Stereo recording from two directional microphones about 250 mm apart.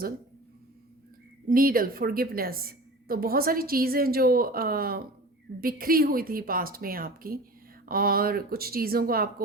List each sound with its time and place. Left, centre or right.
1.5 s a woman's voice: right